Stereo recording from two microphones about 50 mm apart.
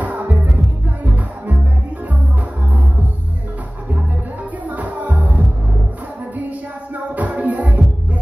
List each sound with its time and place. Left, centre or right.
0.0 s music: right
4.6 s music: right
7.2 s music: right